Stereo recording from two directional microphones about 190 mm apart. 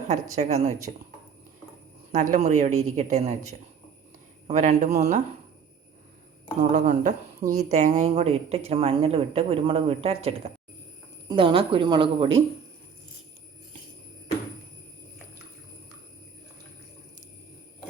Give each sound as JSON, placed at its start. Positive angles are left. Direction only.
{"t": 0.3, "sound": "a woman's voice", "side_deg": -35}
{"t": 2.1, "sound": "a woman's voice", "side_deg": -40}
{"t": 6.6, "sound": "a woman's voice", "side_deg": -40}